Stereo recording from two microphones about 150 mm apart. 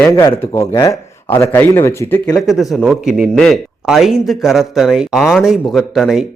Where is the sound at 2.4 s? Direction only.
Centre (ahead or behind).